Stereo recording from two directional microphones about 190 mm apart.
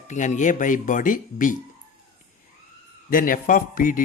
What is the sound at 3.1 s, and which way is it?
Speech, 45° left (ahead or behind).